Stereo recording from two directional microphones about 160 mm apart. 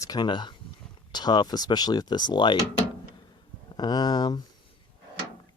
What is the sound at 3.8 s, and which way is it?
Speech, 25° left (ahead or behind).